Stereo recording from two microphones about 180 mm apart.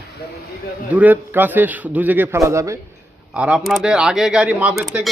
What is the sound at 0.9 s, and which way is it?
A man's voice, 10° right (ahead or behind).